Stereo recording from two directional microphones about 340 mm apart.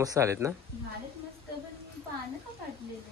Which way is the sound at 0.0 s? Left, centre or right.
Centre.